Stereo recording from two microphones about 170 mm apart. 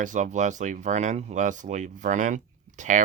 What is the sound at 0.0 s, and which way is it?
Speech, 45° right (ahead or behind).